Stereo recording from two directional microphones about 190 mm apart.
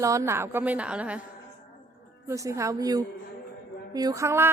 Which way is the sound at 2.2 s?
15° right (ahead or behind).